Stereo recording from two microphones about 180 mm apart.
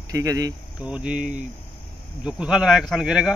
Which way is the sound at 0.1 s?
20° right (ahead or behind).